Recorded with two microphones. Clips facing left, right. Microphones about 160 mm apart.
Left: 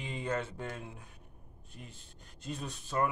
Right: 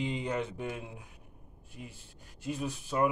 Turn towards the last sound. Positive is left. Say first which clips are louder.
# right 4 dB
turn(degrees=-10)  # may be behind; listen again after turning